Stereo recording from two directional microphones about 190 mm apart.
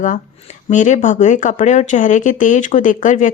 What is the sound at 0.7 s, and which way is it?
A woman's voice, 40° left (ahead or behind).